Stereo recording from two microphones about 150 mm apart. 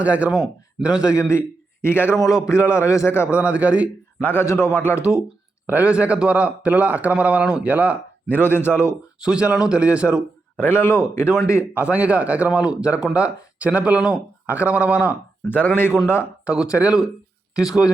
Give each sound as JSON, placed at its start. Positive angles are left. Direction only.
{"t": 0.0, "sound": "speech", "side_deg": -10}
{"t": 1.8, "sound": "speech", "side_deg": 15}
{"t": 3.2, "sound": "speech", "side_deg": -10}
{"t": 4.2, "sound": "speech", "side_deg": 15}
{"t": 5.6, "sound": "speech", "side_deg": -10}
{"t": 8.3, "sound": "speech", "side_deg": 15}
{"t": 9.2, "sound": "speech", "side_deg": -5}
{"t": 10.6, "sound": "speech", "side_deg": 15}
{"t": 11.7, "sound": "speech", "side_deg": -10}
{"t": 15.5, "sound": "speech", "side_deg": 10}
{"t": 16.7, "sound": "speech", "side_deg": -5}